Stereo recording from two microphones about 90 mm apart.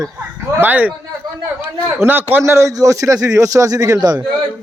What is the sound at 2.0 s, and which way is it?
Speech, 20° right (ahead or behind).